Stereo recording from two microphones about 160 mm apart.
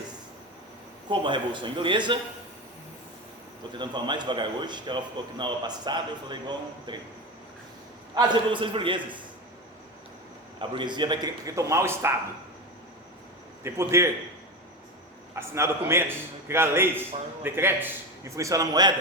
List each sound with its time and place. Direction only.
1.1 s a man's voice: 30° right (ahead or behind)
3.8 s a man's voice: 30° right (ahead or behind)
8.1 s a man's voice: 30° right (ahead or behind)
10.6 s a man's voice: 30° right (ahead or behind)
13.7 s a man's voice: 15° right (ahead or behind)
15.4 s a man's voice: 15° right (ahead or behind)